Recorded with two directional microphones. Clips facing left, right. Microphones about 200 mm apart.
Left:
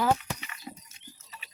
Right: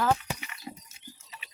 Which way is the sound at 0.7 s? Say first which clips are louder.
Right 1 dB; 15° right (ahead or behind).